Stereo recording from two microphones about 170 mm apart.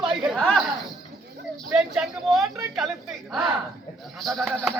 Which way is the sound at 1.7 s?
Centre (ahead or behind).